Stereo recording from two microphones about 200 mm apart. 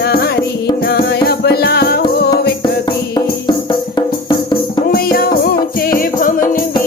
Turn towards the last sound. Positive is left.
turn(degrees=45)  # may be behind; listen again after turning